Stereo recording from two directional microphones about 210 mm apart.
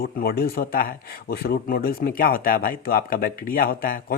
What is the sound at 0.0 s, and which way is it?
Speech, 45° left (ahead or behind).